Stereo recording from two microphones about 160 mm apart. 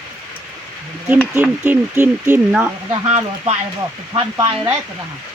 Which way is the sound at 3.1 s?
45° right (ahead or behind).